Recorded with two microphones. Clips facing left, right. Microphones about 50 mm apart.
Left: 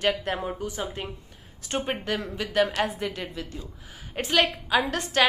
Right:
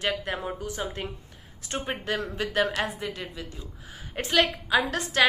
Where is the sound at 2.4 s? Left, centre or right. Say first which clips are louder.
Left 2 dB; right.